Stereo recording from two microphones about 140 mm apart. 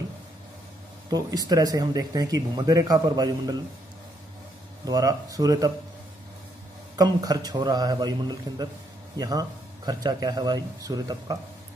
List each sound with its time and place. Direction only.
1.1 s speech: 25° right (ahead or behind)
4.8 s speech: 25° right (ahead or behind)
7.0 s speech: 25° right (ahead or behind)